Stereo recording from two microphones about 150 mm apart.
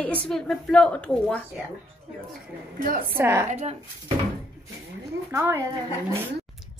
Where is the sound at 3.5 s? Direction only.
45° right (ahead or behind).